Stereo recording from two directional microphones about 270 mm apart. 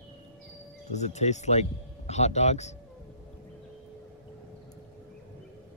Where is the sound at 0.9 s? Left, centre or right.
Left.